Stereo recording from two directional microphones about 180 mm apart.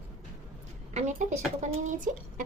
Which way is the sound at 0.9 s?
40° right (ahead or behind).